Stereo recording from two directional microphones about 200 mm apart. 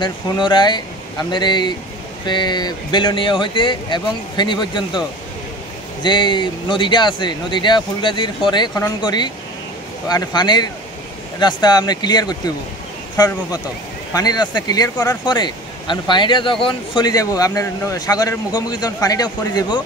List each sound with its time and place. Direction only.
0.0 s speech: 25° left (ahead or behind)
6.0 s speech: 25° left (ahead or behind)